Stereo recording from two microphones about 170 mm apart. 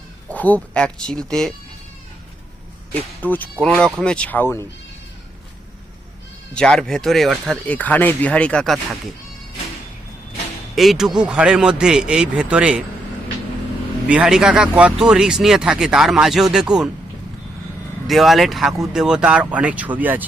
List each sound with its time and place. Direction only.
0.3 s speech: 10° left (ahead or behind)
2.9 s speech: 10° left (ahead or behind)
6.5 s speech: 5° left (ahead or behind)
10.8 s speech: centre (ahead or behind)
14.1 s speech: 5° right (ahead or behind)
18.1 s speech: centre (ahead or behind)